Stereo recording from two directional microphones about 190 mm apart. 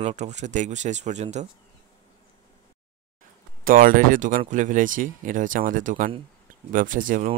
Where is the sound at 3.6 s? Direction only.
45° right (ahead or behind).